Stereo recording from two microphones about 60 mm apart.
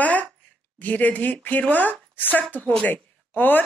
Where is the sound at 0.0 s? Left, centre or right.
Left.